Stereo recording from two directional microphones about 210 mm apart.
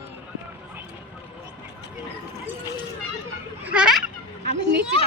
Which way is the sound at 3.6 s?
5° right (ahead or behind).